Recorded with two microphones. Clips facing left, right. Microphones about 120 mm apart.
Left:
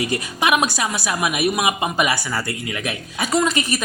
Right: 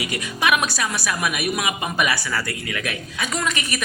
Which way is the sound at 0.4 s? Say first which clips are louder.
Left 2 dB; 25° left (ahead or behind).